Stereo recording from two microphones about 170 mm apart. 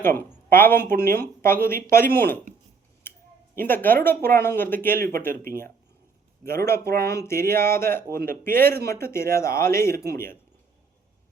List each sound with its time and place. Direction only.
0.0 s speech: 15° left (ahead or behind)
3.1 s a sound: 15° left (ahead or behind)
3.5 s speech: 10° left (ahead or behind)
7.0 s speech: 15° left (ahead or behind)